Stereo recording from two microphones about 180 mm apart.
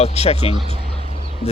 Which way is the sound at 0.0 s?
35° left (ahead or behind).